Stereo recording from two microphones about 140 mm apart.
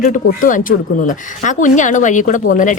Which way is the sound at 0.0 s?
75° left (ahead or behind).